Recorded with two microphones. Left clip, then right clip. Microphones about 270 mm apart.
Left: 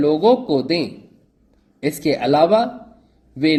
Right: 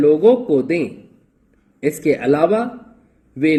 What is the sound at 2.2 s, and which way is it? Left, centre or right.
Speech, centre.